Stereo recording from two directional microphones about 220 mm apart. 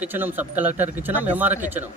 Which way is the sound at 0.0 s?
10° right (ahead or behind).